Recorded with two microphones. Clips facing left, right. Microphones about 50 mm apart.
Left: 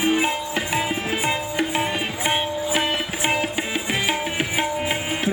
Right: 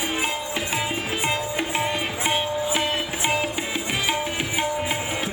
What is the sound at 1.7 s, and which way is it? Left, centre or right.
Music, centre.